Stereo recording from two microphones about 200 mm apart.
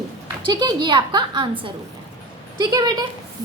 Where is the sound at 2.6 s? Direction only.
20° right (ahead or behind).